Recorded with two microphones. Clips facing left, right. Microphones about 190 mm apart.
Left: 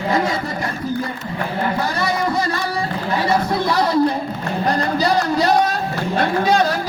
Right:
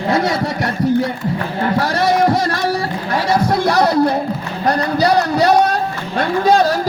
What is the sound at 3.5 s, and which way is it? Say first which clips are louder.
Music: right 4 dB; 80° right.